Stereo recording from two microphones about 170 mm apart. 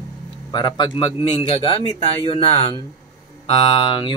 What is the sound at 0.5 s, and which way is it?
Speech, 30° left (ahead or behind).